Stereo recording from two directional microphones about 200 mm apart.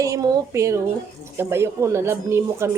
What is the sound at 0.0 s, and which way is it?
A man's voice, 15° right (ahead or behind).